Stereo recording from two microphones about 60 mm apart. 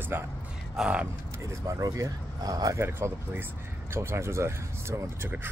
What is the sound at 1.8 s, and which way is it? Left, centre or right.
Speech, right.